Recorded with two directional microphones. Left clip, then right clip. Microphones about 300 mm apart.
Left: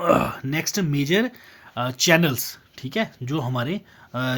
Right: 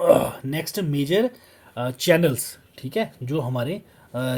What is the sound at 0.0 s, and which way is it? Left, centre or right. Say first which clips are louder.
Speech: right 3 dB; left.